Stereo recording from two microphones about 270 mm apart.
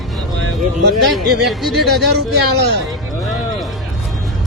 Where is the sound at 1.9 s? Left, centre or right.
Right.